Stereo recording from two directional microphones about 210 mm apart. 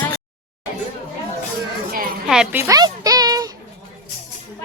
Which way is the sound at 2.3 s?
5° right (ahead or behind).